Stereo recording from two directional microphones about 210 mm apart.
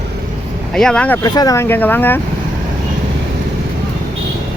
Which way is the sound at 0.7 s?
5° left (ahead or behind).